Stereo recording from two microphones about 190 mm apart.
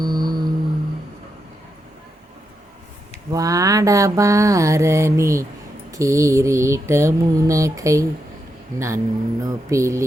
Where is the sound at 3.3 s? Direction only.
20° right (ahead or behind).